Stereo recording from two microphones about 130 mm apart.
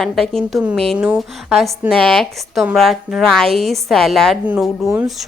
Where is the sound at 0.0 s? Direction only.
Centre (ahead or behind).